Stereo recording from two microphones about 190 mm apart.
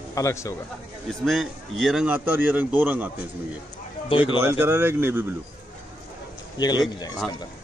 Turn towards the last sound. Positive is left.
turn(degrees=20)  # may be behind; listen again after turning